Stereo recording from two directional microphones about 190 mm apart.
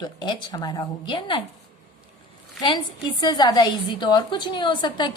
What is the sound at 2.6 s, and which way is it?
A woman's voice, 20° left (ahead or behind).